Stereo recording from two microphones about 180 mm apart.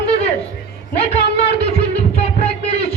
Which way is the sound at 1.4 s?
35° left (ahead or behind).